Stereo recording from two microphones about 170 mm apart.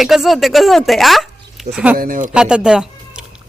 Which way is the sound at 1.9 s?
55° right (ahead or behind).